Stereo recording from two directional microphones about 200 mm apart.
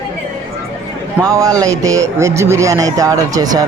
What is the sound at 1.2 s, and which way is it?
A man's voice, 15° right (ahead or behind).